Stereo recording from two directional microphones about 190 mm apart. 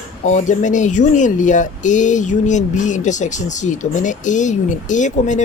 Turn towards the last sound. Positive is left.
turn(degrees=40)  # may be behind; listen again after turning